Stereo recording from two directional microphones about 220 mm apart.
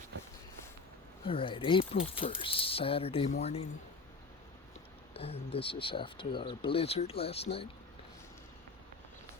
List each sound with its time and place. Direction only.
1.2 s speech: 25° left (ahead or behind)
5.1 s speech: 25° left (ahead or behind)